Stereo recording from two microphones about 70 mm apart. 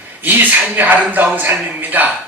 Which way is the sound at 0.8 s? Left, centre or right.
Right.